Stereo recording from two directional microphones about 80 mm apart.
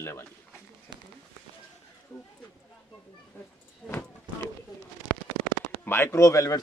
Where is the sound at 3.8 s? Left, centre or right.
Centre.